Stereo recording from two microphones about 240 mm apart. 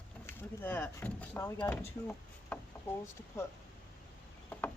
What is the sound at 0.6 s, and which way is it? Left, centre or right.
Speech, centre.